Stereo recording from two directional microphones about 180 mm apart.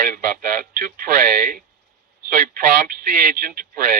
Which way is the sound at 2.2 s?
55° right (ahead or behind).